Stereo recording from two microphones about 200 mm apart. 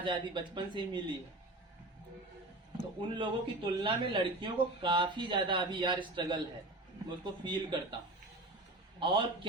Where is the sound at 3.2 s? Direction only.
25° right (ahead or behind).